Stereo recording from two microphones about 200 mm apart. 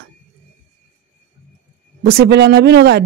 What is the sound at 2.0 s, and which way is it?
Speech, 55° right (ahead or behind).